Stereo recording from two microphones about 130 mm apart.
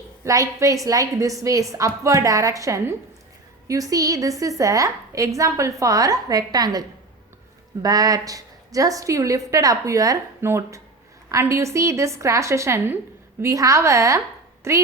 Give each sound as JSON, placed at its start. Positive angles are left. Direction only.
{"t": 0.3, "sound": "a woman's voice", "side_deg": -25}